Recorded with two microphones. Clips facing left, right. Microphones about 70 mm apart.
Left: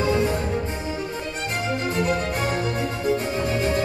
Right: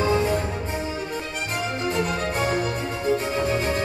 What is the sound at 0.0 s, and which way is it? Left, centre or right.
Music, right.